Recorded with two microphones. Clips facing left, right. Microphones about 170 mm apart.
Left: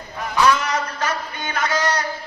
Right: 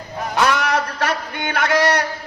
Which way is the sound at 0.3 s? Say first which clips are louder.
Even; 70° right (ahead or behind).